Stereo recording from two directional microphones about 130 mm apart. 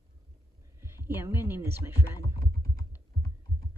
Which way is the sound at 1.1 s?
15° right (ahead or behind).